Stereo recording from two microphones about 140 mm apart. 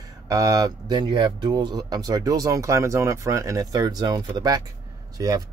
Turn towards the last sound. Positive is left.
turn(degrees=-25)  # may be behind; listen again after turning